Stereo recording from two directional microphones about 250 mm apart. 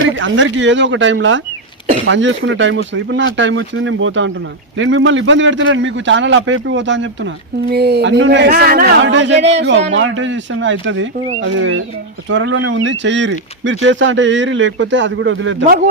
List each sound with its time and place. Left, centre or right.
0.2 s a man's voice: right